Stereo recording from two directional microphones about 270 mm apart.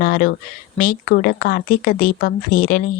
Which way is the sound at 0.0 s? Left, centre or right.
Left.